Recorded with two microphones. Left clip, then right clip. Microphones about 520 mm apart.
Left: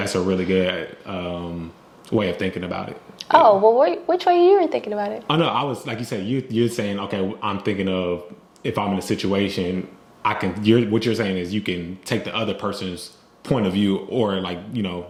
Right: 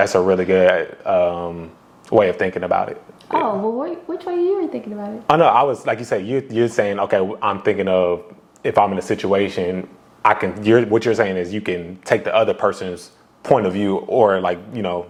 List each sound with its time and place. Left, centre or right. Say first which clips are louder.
0.0 s a man's voice: right 7 dB; right
3.2 s speech: left 7 dB; left
5.3 s a man's voice: right 9 dB; right